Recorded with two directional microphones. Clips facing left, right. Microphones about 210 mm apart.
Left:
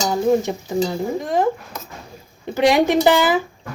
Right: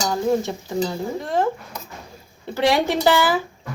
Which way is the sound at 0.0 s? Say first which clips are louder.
Left 3 dB; 15° left (ahead or behind).